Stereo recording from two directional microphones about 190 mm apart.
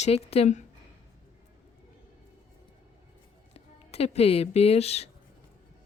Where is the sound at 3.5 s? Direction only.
30° left (ahead or behind).